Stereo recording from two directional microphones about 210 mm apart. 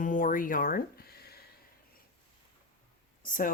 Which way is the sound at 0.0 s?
40° left (ahead or behind).